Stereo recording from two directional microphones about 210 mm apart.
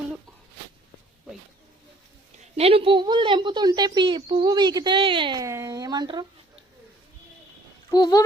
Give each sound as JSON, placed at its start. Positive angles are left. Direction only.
{"t": 2.6, "sound": "speech", "side_deg": -30}
{"t": 7.9, "sound": "speech", "side_deg": 20}